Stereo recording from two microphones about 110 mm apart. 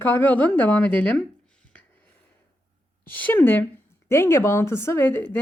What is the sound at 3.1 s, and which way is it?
Speech, 15° left (ahead or behind).